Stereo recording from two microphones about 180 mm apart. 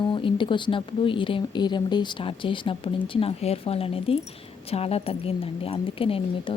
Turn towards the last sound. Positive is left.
turn(degrees=30)  # may be behind; listen again after turning